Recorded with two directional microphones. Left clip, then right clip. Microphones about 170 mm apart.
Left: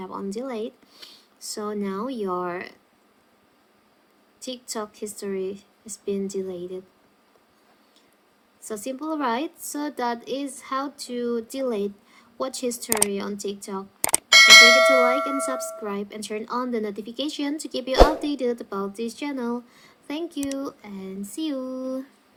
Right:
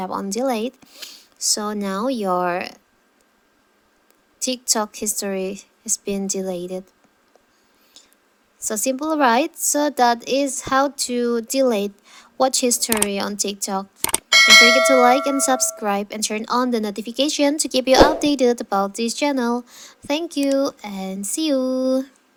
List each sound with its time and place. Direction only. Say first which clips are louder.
0.0 s a woman's voice: right 9 dB; 45° right (ahead or behind)
0.9 s speech: right 9 dB; 35° right (ahead or behind)
4.4 s a woman's voice: right 10 dB; 45° right (ahead or behind)
8.6 s a woman's voice: right 8 dB; 45° right (ahead or behind)
14.0 s bell: even; centre (ahead or behind)
15.8 s a woman's voice: right 9 dB; 45° right (ahead or behind)